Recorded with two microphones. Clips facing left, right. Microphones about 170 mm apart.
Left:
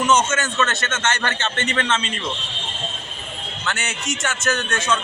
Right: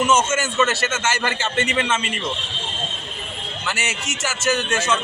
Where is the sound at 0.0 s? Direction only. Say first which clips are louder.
Even; 5° right (ahead or behind).